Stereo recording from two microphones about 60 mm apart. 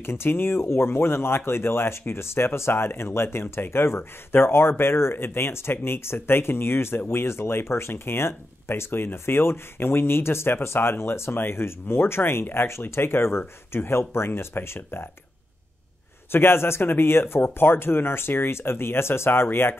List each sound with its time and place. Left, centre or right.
0.0 s speech: left
16.3 s speech: left